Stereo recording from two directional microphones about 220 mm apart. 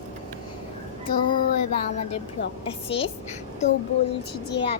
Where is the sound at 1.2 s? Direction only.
40° left (ahead or behind).